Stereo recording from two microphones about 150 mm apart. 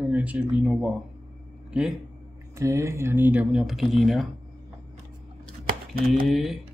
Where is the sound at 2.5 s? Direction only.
20° right (ahead or behind); by 4.3 s centre (ahead or behind).